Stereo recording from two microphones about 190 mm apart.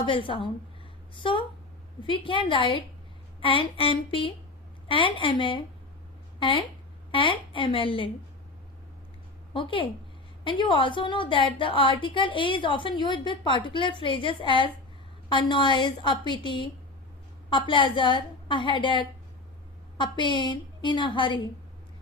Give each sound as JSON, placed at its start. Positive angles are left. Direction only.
{"t": 0.0, "sound": "a woman's voice", "side_deg": 25}
{"t": 7.1, "sound": "a woman's voice", "side_deg": 25}
{"t": 9.5, "sound": "a woman's voice", "side_deg": 25}